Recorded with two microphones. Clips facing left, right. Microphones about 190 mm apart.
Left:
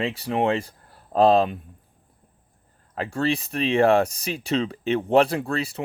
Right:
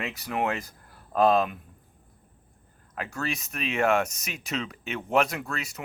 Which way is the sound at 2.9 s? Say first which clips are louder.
Left 8 dB; 30° left (ahead or behind).